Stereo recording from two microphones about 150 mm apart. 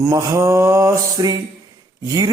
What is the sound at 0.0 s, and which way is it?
A man's voice, 20° right (ahead or behind).